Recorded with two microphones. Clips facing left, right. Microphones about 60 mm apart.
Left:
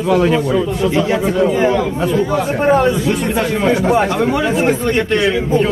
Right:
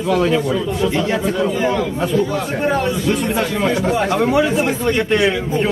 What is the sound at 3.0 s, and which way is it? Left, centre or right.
Speech, centre.